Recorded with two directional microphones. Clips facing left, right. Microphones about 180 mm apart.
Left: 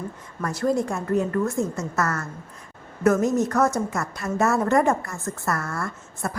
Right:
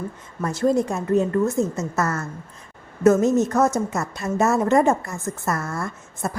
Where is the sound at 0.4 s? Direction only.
25° right (ahead or behind).